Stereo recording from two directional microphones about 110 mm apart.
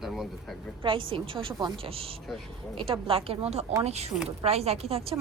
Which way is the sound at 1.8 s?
60° right (ahead or behind).